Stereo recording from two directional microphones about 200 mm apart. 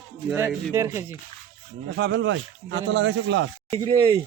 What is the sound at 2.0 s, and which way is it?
Speech, 65° right (ahead or behind).